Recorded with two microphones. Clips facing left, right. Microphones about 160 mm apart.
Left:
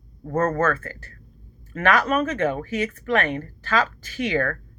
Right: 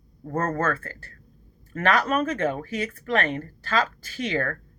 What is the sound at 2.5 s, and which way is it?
Speech, 35° right (ahead or behind).